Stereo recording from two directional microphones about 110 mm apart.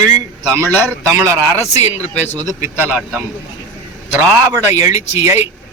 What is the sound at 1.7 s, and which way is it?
Speech, 90° left.